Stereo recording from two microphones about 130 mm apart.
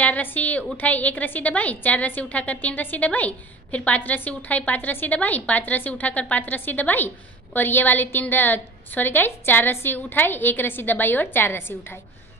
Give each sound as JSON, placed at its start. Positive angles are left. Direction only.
{"t": 0.0, "sound": "a woman's voice", "side_deg": 15}